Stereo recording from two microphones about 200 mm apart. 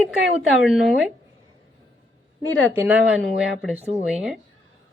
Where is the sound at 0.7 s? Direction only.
Centre (ahead or behind).